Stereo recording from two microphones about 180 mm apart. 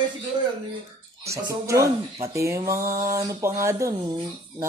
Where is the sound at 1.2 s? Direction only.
15° right (ahead or behind).